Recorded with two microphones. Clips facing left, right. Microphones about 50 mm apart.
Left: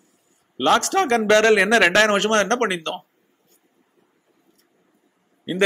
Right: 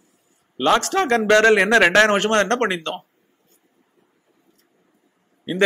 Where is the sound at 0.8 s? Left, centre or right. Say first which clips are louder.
Even; right.